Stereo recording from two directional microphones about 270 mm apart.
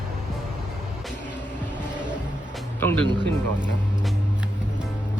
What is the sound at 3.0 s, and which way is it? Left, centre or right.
Speech, centre.